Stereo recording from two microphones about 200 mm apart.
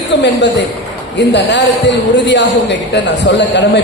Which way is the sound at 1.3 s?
60° left (ahead or behind).